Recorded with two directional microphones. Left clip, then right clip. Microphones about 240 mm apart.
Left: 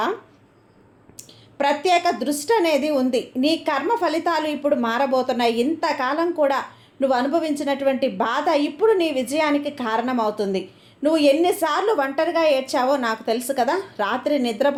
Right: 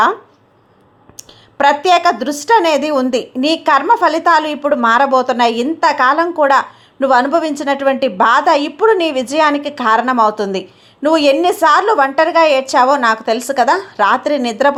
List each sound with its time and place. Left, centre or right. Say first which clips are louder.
1.1 s a woman's voice: right 9 dB; right